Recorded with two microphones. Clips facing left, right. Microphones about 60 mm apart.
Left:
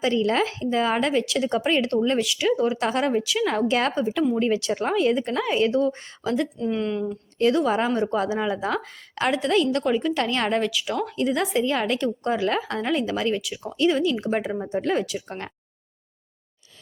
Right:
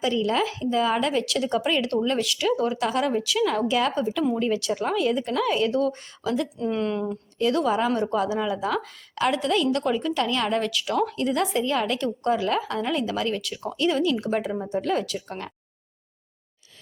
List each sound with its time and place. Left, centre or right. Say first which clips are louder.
0.0 s speech: left 2 dB; left
2.7 s speech: left 1 dB; left
3.7 s a woman's voice: left 1 dB; left
3.9 s speech: left 2 dB; left
6.6 s speech: even; centre
7.9 s speech: left 1 dB; left
9.8 s speech: left 2 dB; centre
10.2 s speech: left 1 dB; left
10.6 s speech: right 1 dB; centre